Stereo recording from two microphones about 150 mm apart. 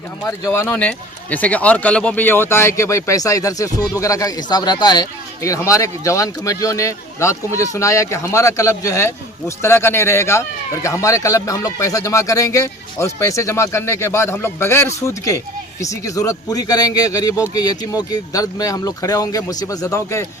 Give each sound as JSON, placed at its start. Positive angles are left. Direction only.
{"t": 0.3, "sound": "speech", "side_deg": 20}